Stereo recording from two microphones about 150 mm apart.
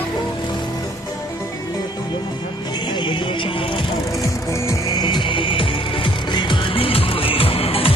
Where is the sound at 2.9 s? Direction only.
30° left (ahead or behind).